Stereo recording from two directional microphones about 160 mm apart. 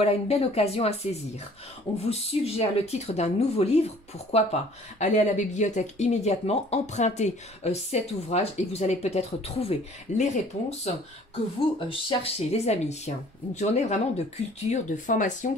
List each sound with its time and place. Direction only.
0.0 s speech: 40° left (ahead or behind)